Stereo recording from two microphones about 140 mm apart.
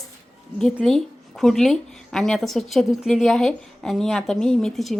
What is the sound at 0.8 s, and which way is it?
A woman's voice, centre (ahead or behind).